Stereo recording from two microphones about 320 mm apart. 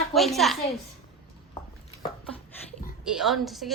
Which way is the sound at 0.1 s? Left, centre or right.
Centre.